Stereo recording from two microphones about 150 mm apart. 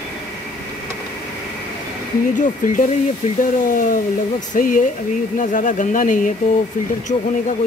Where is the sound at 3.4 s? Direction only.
60° left (ahead or behind).